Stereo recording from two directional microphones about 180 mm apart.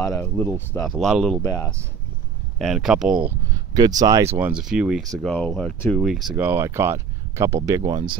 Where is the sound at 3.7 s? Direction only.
20° right (ahead or behind); by 6.0 s 10° left (ahead or behind).